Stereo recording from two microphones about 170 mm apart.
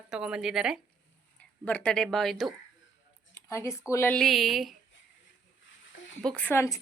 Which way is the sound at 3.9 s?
15° left (ahead or behind).